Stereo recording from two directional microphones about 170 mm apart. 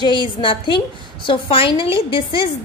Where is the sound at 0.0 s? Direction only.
30° left (ahead or behind).